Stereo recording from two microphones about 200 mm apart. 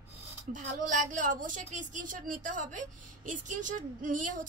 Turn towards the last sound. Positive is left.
turn(degrees=-40)  # may be behind; listen again after turning